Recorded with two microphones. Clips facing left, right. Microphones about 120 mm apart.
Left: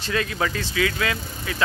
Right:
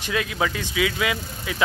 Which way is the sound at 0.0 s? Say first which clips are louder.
Even; 10° right (ahead or behind).